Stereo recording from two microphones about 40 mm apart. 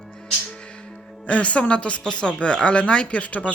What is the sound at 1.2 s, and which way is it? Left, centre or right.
Speech, left.